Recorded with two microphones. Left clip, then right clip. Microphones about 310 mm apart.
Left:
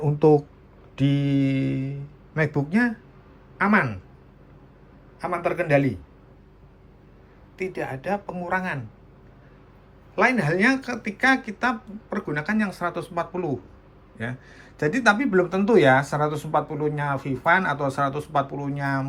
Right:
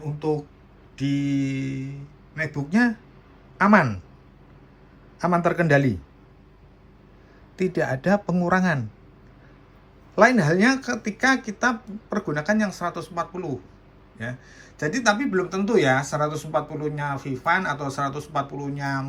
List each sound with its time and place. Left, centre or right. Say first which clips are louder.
0.2 s speech: left 8 dB; centre
5.2 s speech: right 3 dB; centre
7.9 s speech: right 5 dB; centre
10.2 s speech: right 3 dB; centre